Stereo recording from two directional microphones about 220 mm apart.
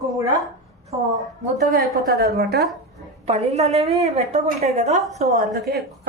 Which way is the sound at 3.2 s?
30° right (ahead or behind).